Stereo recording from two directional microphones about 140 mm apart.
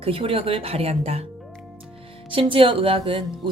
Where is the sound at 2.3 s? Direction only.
40° right (ahead or behind).